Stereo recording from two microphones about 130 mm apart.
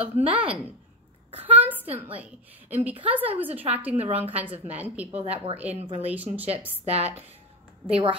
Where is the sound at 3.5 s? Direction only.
50° right (ahead or behind).